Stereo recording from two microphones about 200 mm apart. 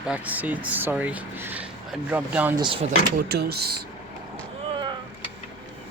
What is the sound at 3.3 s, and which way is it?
Speech, 55° right (ahead or behind).